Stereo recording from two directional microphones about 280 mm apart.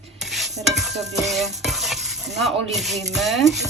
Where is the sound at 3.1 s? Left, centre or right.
Centre.